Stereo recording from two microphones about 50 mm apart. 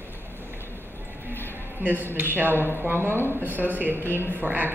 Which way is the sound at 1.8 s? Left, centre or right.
Right.